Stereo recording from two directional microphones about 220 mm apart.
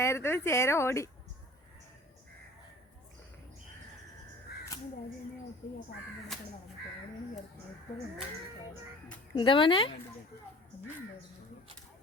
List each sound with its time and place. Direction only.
0.0 s speech: 10° left (ahead or behind)
6.3 s speech: centre (ahead or behind)
9.3 s speech: 20° left (ahead or behind)